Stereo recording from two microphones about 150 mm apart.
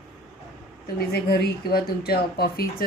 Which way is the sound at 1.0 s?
90° left.